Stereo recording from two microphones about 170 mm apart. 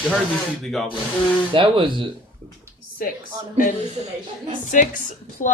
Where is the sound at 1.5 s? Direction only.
30° right (ahead or behind).